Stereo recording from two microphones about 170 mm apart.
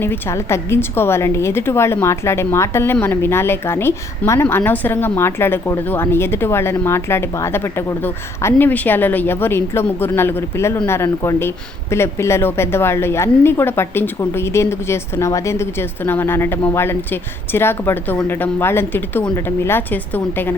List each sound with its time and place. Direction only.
0.0 s a woman's voice: 15° left (ahead or behind)